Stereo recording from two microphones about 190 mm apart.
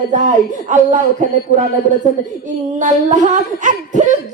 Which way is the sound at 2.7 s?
40° right (ahead or behind).